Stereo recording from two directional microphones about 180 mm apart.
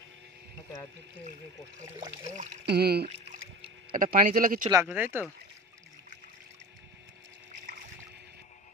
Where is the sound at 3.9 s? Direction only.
50° right (ahead or behind).